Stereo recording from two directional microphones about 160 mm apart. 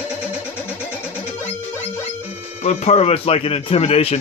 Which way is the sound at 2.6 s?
45° left (ahead or behind).